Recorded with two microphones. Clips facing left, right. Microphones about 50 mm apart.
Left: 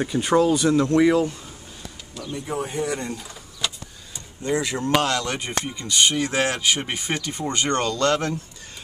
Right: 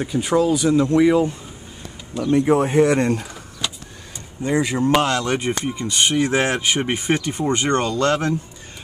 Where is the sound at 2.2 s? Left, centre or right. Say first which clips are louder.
Right 12 dB; right.